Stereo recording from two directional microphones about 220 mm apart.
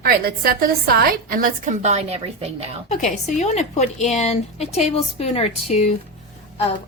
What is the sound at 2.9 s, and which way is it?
Speech, 30° left (ahead or behind).